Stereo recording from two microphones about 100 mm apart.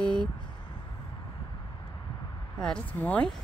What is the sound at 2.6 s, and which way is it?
Speech, 10° left (ahead or behind).